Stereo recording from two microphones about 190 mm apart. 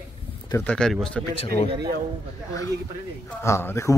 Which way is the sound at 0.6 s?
5° left (ahead or behind).